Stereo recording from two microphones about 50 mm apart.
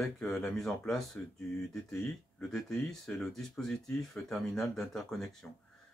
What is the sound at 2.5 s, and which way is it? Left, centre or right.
Speech, centre.